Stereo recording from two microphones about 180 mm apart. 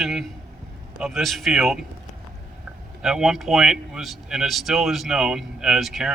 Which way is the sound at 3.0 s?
Centre (ahead or behind).